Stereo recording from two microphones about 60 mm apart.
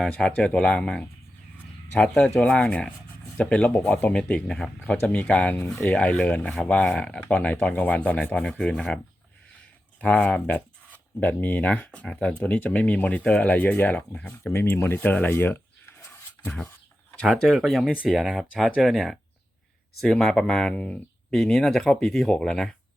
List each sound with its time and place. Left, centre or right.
0.3 s speech: centre
4.9 s speech: left
10.0 s speech: left
14.4 s speech: left
14.9 s speech: left
16.0 s a sound: left
17.2 s speech: centre
20.7 s speech: left
21.3 s speech: centre